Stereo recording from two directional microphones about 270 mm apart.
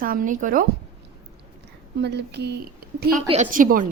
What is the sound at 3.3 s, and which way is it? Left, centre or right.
Speech, right.